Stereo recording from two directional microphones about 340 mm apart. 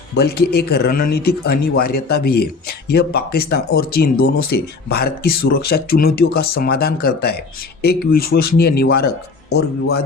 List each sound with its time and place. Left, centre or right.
0.1 s speech: left